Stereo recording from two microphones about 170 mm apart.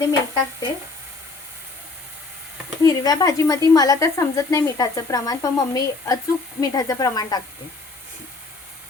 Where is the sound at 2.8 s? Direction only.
20° left (ahead or behind).